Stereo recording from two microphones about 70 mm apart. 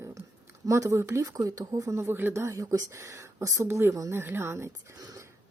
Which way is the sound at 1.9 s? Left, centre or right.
Right.